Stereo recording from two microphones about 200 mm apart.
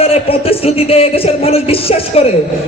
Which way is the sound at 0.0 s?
30° left (ahead or behind).